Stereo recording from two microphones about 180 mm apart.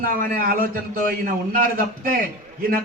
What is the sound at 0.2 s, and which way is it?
Speech, 50° right (ahead or behind).